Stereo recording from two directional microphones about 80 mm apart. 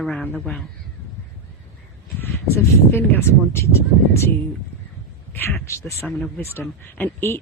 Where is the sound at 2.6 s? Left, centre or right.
Left.